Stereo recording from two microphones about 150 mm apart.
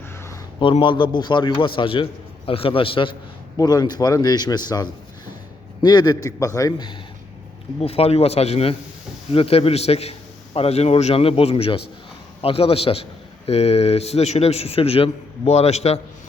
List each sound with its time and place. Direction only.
0.6 s a man's voice: 35° left (ahead or behind)
7.8 s a man's voice: 40° left (ahead or behind)